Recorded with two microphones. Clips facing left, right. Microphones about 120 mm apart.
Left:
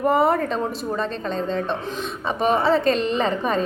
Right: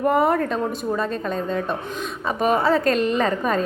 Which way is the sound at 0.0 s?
Centre (ahead or behind).